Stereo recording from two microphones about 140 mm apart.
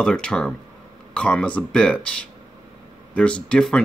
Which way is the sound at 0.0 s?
5° left (ahead or behind).